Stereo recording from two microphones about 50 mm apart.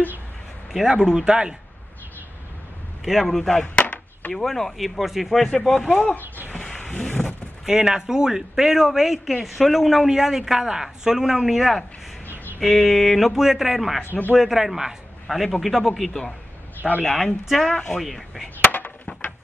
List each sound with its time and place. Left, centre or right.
0.7 s speech: centre
3.1 s speech: centre
3.6 s chop: left
4.3 s speech: centre
5.5 s speech: centre
6.2 s a sound: right
6.5 s a sound: centre
7.6 s speech: centre
16.1 s speech: centre
17.7 s speech: centre
18.0 s speech: centre